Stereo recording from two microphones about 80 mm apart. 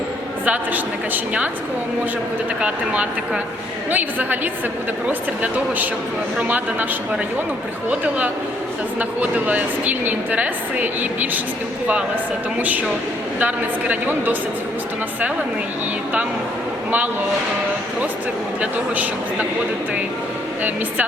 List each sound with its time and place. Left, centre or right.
0.4 s a woman's voice: right
2.6 s a woman's voice: centre
7.9 s a woman's voice: centre
12.5 s a woman's voice: right
18.6 s a woman's voice: centre